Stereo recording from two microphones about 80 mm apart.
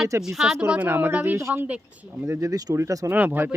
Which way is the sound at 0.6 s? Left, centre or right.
Centre.